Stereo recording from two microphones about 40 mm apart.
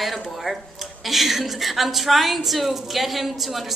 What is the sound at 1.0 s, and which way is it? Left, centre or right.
A woman's voice, centre.